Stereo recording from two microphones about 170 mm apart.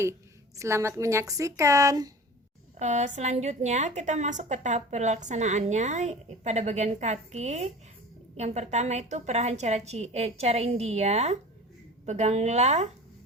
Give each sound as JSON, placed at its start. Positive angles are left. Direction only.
{"t": 0.0, "sound": "a woman's voice", "side_deg": -15}
{"t": 2.7, "sound": "a woman's voice", "side_deg": -45}